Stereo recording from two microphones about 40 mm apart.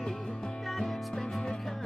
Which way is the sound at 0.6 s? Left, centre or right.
Centre.